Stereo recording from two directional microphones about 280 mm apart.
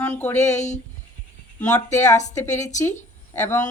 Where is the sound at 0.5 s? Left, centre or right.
Left.